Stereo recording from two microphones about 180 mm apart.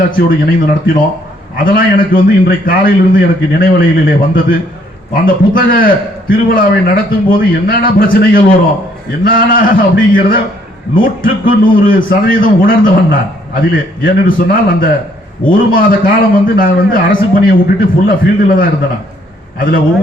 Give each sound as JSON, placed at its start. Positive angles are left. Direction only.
{"t": 0.3, "sound": "a man's voice", "side_deg": 50}
{"t": 9.5, "sound": "a man's voice", "side_deg": 50}